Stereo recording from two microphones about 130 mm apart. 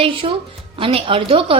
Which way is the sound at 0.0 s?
45° right (ahead or behind).